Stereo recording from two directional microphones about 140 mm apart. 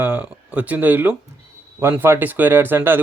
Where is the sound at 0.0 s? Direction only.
10° right (ahead or behind).